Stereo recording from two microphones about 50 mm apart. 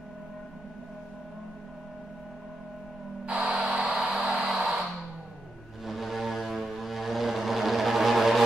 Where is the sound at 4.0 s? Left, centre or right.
Centre.